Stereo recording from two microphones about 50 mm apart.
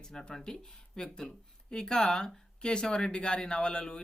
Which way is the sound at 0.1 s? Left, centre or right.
Centre.